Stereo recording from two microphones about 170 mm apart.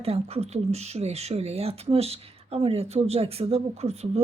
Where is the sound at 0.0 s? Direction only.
35° right (ahead or behind).